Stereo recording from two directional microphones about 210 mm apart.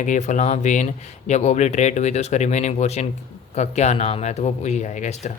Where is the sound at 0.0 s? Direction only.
35° left (ahead or behind).